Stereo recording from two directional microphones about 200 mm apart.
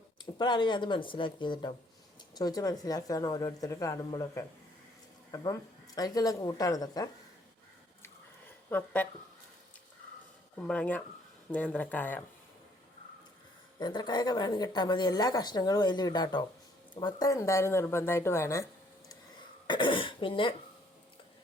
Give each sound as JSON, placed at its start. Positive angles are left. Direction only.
{"t": 0.3, "sound": "speech", "side_deg": 20}
{"t": 8.7, "sound": "speech", "side_deg": 10}
{"t": 10.6, "sound": "speech", "side_deg": 5}
{"t": 13.7, "sound": "speech", "side_deg": 20}
{"t": 19.6, "sound": "speech", "side_deg": 25}